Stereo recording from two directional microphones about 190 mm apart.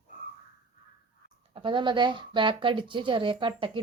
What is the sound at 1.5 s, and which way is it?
Speech, 25° right (ahead or behind).